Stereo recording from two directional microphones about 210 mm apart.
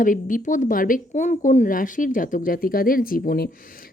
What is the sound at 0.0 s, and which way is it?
Speech, 40° left (ahead or behind).